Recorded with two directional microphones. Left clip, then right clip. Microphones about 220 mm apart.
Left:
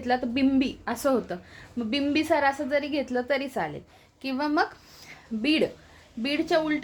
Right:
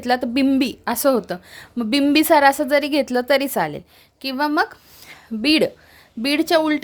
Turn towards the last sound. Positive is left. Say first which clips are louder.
# right 7 dB
turn(degrees=-50)  # may be behind; listen again after turning